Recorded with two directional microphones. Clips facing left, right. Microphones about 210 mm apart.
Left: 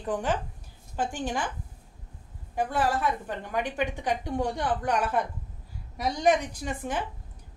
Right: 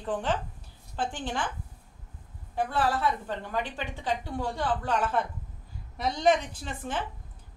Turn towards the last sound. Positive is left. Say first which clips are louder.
# left 3 dB
turn(degrees=15)  # may be behind; listen again after turning